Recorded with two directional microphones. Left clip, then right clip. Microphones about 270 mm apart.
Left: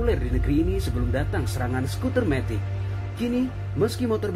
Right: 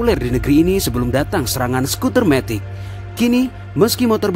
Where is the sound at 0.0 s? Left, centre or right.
Right.